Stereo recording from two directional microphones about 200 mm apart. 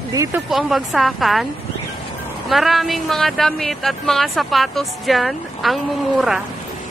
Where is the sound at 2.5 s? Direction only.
Centre (ahead or behind).